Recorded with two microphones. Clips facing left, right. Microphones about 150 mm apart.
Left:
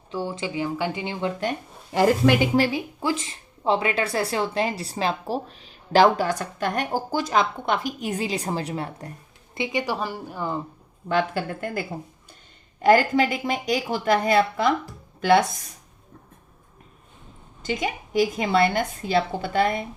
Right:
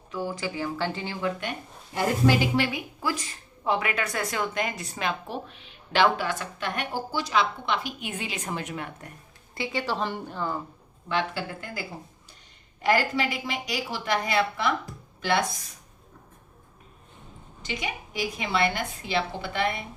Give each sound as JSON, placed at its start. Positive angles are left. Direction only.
{"t": 0.1, "sound": "speech", "side_deg": 25}
{"t": 1.9, "sound": "speech", "side_deg": 80}
{"t": 2.6, "sound": "speech", "side_deg": 30}
{"t": 9.6, "sound": "a woman's voice", "side_deg": 15}
{"t": 11.1, "sound": "a woman's voice", "side_deg": 50}
{"t": 17.6, "sound": "a woman's voice", "side_deg": 45}